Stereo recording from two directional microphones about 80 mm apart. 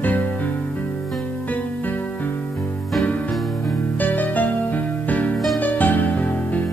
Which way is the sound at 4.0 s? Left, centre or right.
Left.